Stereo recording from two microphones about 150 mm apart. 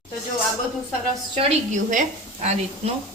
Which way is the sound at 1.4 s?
55° right (ahead or behind).